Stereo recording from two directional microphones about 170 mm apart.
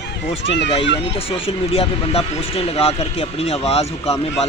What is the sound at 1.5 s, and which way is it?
Speech, 35° left (ahead or behind).